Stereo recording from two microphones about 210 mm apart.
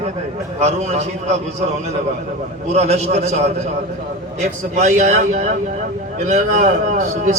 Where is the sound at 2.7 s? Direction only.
30° right (ahead or behind).